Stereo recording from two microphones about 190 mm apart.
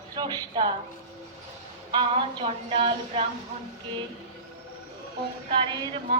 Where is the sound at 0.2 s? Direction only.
25° right (ahead or behind).